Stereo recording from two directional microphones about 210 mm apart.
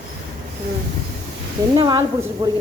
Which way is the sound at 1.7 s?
20° right (ahead or behind).